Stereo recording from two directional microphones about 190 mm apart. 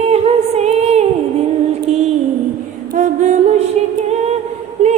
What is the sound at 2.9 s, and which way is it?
Music, 40° right (ahead or behind).